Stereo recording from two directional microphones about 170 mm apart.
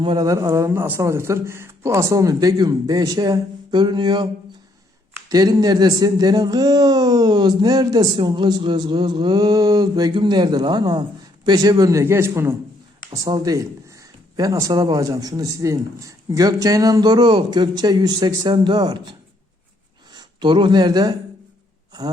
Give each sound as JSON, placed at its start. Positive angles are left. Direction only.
{"t": 0.0, "sound": "speech", "side_deg": -25}
{"t": 5.3, "sound": "a man's voice", "side_deg": -20}
{"t": 20.1, "sound": "speech", "side_deg": -30}